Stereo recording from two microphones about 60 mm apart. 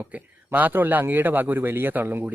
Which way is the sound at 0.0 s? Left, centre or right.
Right.